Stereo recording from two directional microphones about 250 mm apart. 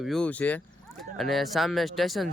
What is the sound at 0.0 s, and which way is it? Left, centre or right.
Speech, centre.